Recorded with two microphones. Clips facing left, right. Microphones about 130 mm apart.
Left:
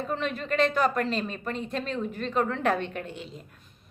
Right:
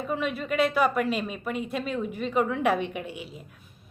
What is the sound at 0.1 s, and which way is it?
A woman's voice, 10° right (ahead or behind).